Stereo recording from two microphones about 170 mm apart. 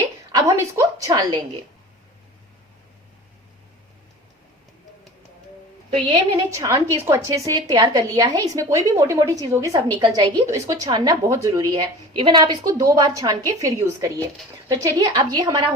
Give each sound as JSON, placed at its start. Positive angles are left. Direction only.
{"t": 0.3, "sound": "a woman's voice", "side_deg": -20}
{"t": 6.1, "sound": "a woman's voice", "side_deg": -25}